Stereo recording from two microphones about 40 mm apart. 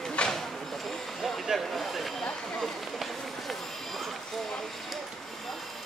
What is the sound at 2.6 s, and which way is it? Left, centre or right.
Run, centre.